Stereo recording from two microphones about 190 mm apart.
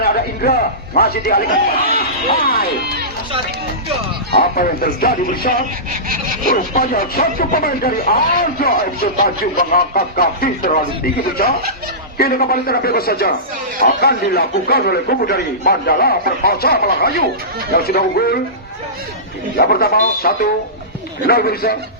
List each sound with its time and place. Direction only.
0.0 s a sound: 55° left (ahead or behind)
0.9 s a man's voice: 50° left (ahead or behind)
4.3 s a man's voice: 50° left (ahead or behind)
19.5 s a man's voice: 55° left (ahead or behind)